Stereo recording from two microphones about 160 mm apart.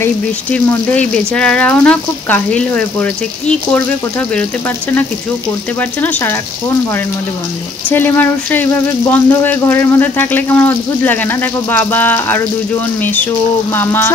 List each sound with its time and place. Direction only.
0.0 s speech: 10° left (ahead or behind)
5.8 s speech: 10° left (ahead or behind)
7.9 s speech: 10° left (ahead or behind)